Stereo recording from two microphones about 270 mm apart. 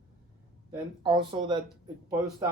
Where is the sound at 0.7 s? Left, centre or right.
Centre.